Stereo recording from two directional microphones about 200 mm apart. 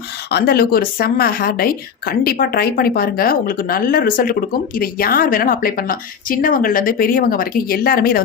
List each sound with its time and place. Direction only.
0.3 s a woman's voice: 50° left (ahead or behind)